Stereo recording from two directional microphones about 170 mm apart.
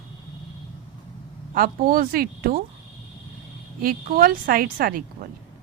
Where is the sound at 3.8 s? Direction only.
60° right (ahead or behind).